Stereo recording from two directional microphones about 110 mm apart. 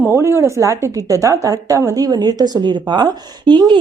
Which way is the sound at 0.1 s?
25° right (ahead or behind).